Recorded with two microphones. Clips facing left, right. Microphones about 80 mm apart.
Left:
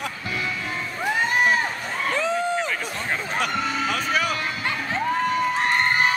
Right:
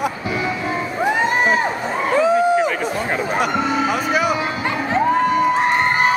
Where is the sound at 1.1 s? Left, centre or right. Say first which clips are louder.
Right 3 dB; right.